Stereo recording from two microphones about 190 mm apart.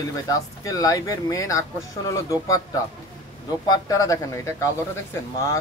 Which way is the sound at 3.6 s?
20° left (ahead or behind).